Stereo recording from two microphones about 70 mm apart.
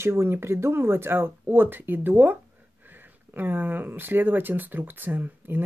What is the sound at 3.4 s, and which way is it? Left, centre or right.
Speech, right.